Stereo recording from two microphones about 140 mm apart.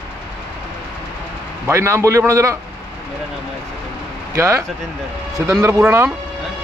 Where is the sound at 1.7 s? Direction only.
20° right (ahead or behind).